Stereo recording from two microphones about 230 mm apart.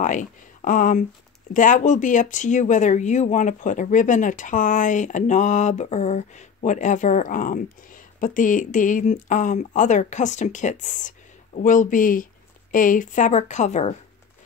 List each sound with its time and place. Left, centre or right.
0.0 s speech: left